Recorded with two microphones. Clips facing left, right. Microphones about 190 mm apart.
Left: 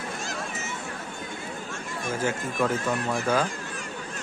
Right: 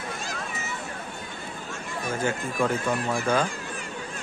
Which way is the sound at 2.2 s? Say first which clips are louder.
Even; centre (ahead or behind).